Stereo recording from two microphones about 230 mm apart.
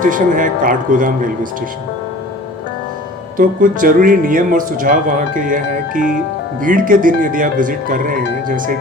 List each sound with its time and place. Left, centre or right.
0.0 s speech: right
3.3 s speech: right